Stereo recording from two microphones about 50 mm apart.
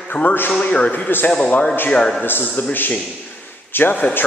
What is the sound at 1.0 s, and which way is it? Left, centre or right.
Speech, left.